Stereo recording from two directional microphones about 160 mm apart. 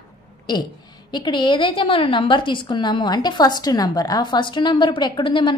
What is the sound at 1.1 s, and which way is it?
A woman's voice, 30° left (ahead or behind).